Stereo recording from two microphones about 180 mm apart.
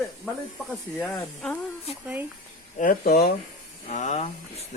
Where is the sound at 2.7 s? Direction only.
45° left (ahead or behind).